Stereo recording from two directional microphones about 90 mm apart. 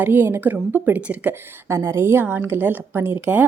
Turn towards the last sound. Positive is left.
turn(degrees=-20)  # may be behind; listen again after turning